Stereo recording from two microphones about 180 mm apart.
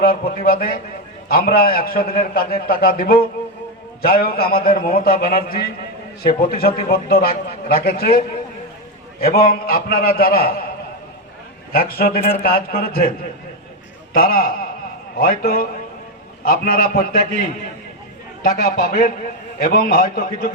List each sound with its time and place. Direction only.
0.0 s a man's voice: 55° left (ahead or behind)
9.2 s a man's voice: 55° left (ahead or behind)
11.7 s a man's voice: 55° left (ahead or behind)
14.1 s a man's voice: 55° left (ahead or behind)